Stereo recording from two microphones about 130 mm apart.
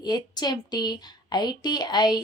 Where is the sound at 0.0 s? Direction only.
30° left (ahead or behind).